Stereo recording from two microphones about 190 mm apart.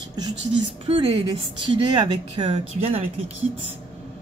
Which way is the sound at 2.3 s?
25° right (ahead or behind).